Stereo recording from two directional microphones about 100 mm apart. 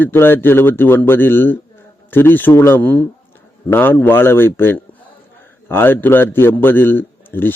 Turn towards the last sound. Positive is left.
turn(degrees=20)  # may be behind; listen again after turning